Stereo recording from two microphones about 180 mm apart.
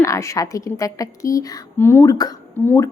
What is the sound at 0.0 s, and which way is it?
A woman's voice, 15° left (ahead or behind).